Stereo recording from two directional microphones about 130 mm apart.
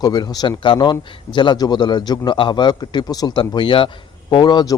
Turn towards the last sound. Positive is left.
turn(degrees=35)  # may be behind; listen again after turning